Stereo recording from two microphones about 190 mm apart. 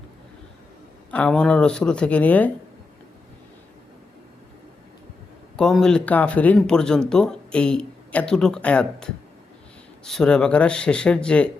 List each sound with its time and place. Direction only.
1.1 s speech: 5° left (ahead or behind)
5.5 s speech: 5° left (ahead or behind)